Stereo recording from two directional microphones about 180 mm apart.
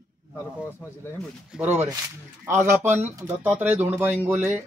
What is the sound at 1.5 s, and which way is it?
Speech, 5° right (ahead or behind).